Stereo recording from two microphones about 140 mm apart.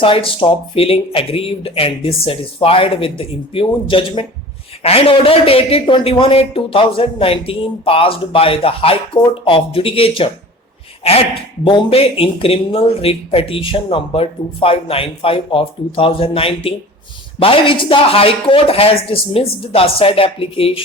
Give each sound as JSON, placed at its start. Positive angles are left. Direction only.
{"t": 0.0, "sound": "speech", "side_deg": 40}